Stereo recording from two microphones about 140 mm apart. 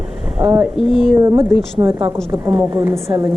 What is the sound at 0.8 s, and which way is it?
Speech, 40° left (ahead or behind).